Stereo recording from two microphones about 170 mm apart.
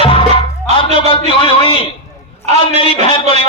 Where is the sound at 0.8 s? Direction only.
30° left (ahead or behind).